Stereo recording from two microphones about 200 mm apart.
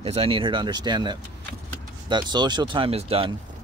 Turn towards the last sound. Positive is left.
turn(degrees=-30)  # may be behind; listen again after turning